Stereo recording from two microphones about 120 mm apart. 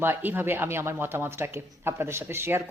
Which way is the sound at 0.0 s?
15° right (ahead or behind).